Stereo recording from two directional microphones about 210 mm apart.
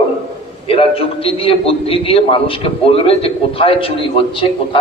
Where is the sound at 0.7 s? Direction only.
25° left (ahead or behind).